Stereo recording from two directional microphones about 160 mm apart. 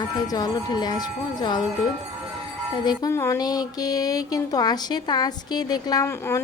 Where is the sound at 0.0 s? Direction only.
25° left (ahead or behind).